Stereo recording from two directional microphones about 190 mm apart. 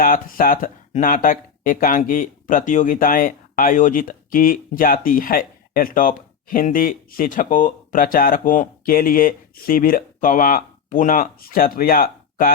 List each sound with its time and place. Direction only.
0.0 s speech: 45° left (ahead or behind)